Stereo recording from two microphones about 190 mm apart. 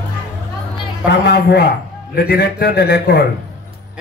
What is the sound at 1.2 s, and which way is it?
Speech, 60° left (ahead or behind).